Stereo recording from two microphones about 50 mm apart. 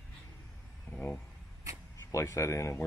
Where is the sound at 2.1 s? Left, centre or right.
Left.